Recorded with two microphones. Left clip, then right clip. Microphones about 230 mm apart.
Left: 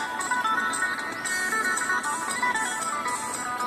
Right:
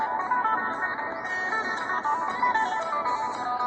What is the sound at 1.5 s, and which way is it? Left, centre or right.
Music, left.